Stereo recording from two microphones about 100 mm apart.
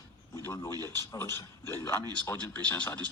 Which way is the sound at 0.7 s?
40° right (ahead or behind).